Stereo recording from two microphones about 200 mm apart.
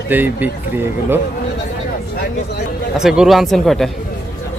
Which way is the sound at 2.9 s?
5° right (ahead or behind).